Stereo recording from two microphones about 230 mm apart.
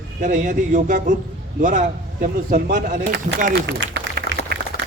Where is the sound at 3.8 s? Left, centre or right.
Right.